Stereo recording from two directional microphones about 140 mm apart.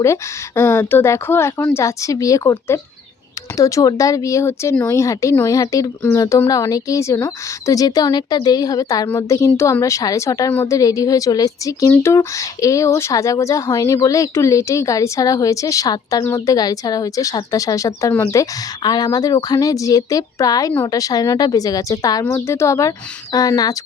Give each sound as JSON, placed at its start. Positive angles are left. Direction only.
{"t": 0.0, "sound": "speech", "side_deg": 20}